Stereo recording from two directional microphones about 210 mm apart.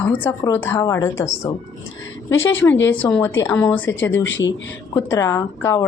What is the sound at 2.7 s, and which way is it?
Speech, 60° left (ahead or behind).